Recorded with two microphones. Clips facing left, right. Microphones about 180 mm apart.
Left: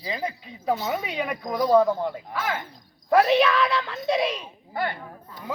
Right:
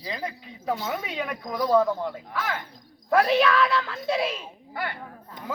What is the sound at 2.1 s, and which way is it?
Speech, 5° left (ahead or behind).